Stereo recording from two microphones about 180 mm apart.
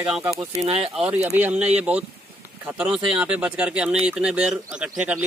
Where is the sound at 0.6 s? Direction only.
35° right (ahead or behind).